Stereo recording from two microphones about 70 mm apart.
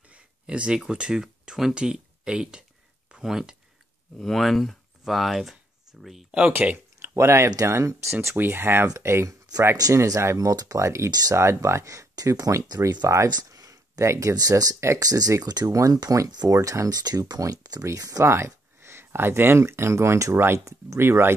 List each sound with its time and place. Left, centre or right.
0.1 s speech: centre
4.2 s speech: centre
6.6 s speech: centre
7.0 s speech: right
10.5 s speech: right
10.8 s speech: right
13.1 s speech: right
13.5 s a sound: right
14.3 s speech: right
16.4 s speech: right
18.2 s speech: right
20.3 s speech: right